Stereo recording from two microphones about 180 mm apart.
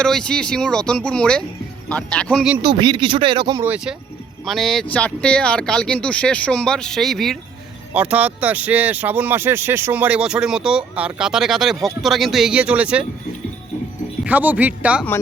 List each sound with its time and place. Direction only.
0.0 s speech: 5° left (ahead or behind)
2.6 s speech: 25° right (ahead or behind)
3.6 s speech: 10° right (ahead or behind)
14.3 s speech: 10° right (ahead or behind)